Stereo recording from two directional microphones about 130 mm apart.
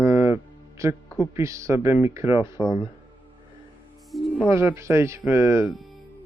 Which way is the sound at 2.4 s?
35° left (ahead or behind).